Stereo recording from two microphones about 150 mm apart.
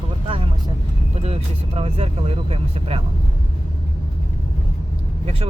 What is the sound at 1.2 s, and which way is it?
Speech, 40° right (ahead or behind).